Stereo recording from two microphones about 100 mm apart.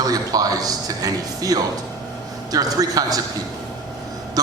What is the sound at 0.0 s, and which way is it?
Speech, 40° right (ahead or behind).